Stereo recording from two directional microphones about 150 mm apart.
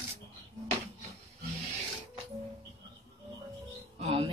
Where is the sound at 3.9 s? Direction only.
40° right (ahead or behind).